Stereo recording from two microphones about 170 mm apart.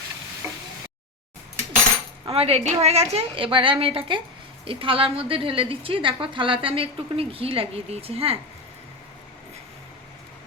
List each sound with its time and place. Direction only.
2.2 s a woman's voice: 35° right (ahead or behind)